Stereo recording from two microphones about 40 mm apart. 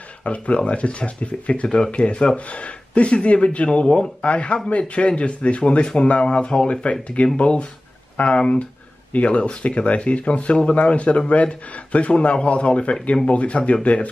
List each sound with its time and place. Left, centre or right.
0.2 s speech: left